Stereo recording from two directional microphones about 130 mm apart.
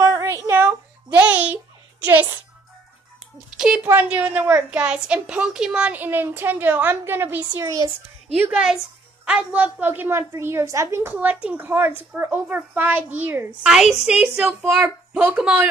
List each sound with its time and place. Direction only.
0.0 s child singing: 25° right (ahead or behind)
3.5 s a woman's voice: 5° right (ahead or behind)
13.6 s a woman's voice: 5° right (ahead or behind)